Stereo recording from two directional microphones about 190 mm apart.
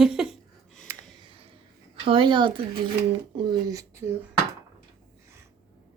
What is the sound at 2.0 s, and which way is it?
Speech, 25° right (ahead or behind).